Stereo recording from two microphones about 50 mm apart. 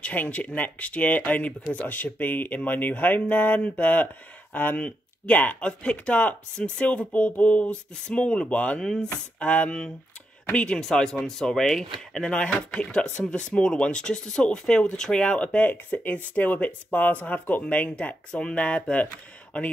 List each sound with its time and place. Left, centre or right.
0.0 s speech: left
4.8 s speech: left
5.6 s speech: left
8.8 s speech: centre
9.4 s speech: left
10.8 s speech: centre; by 19.0 s left